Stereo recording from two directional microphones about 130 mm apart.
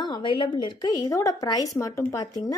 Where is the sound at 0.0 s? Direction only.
35° left (ahead or behind).